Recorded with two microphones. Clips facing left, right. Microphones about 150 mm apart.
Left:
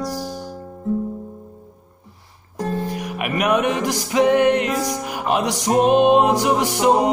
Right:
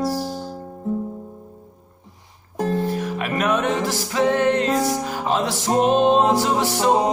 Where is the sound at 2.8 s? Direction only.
15° left (ahead or behind).